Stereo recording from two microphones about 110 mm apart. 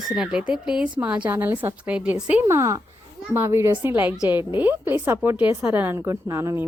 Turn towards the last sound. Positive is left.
turn(degrees=-25)  # may be behind; listen again after turning